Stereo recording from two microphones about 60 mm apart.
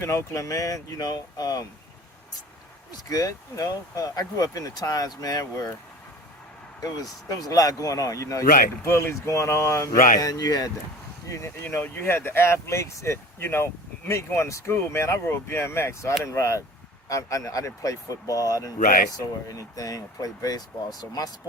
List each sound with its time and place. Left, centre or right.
0.0 s speech: left
3.1 s speech: left
6.7 s speech: left
8.9 s speech: left
10.2 s speech: left
11.3 s speech: left
11.8 s speech: left